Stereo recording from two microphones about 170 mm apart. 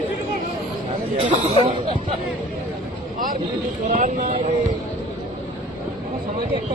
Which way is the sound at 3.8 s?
50° right (ahead or behind).